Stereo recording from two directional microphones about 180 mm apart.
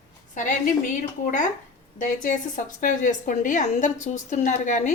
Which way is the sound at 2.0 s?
45° left (ahead or behind).